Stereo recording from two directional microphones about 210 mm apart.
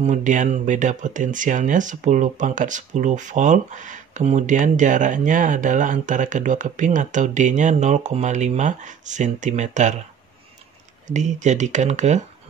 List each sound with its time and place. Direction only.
0.0 s speech: 35° right (ahead or behind)
11.1 s speech: 35° right (ahead or behind)